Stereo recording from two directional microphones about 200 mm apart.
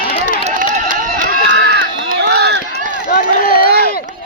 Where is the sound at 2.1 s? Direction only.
55° right (ahead or behind).